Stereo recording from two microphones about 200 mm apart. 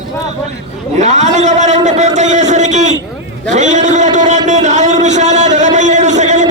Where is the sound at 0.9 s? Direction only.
35° right (ahead or behind).